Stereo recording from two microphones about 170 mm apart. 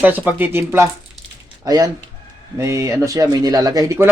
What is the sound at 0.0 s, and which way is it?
A man's voice, 10° right (ahead or behind).